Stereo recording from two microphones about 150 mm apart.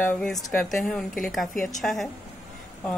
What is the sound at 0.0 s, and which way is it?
A woman's voice, 10° left (ahead or behind).